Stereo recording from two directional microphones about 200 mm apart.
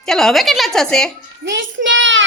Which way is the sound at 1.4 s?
65° right (ahead or behind).